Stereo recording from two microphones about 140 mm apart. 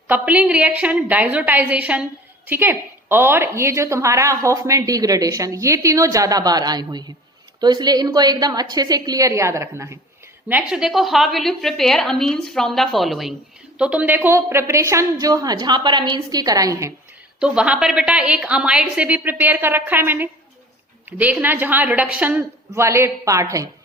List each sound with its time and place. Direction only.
0.1 s a woman's voice: 10° right (ahead or behind)
10.5 s a woman's voice: 5° right (ahead or behind); by 16.9 s 25° right (ahead or behind)
17.4 s a woman's voice: 5° right (ahead or behind); by 23.6 s 20° right (ahead or behind)